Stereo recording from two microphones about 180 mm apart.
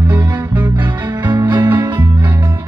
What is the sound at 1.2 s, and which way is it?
Music, 25° right (ahead or behind).